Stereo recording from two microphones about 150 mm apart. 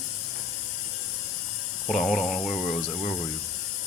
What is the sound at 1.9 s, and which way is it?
Speech, centre (ahead or behind).